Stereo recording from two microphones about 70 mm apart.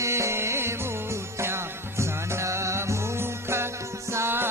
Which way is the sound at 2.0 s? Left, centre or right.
Right.